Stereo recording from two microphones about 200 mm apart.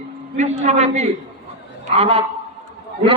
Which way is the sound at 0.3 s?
35° right (ahead or behind).